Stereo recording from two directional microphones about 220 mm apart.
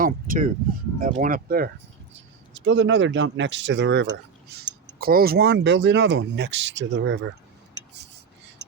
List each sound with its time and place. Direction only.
0.0 s a sound: 40° right (ahead or behind)
0.9 s speech: 40° right (ahead or behind)
2.5 s speech: 55° right (ahead or behind)